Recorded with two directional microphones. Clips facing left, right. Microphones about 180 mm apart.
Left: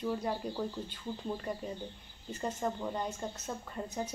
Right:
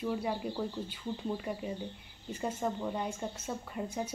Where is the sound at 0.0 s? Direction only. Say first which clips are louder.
Right 1 dB; 5° right (ahead or behind).